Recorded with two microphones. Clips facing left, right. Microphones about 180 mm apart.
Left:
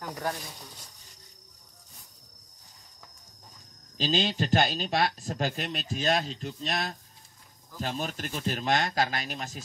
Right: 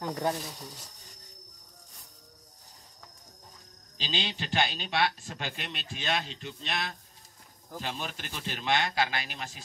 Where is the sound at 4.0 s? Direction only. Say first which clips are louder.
Left 8 dB; 45° left (ahead or behind).